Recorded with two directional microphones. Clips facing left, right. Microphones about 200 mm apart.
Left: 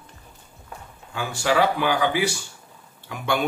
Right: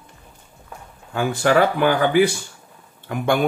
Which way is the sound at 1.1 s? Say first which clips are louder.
Right 5 dB; 55° right (ahead or behind).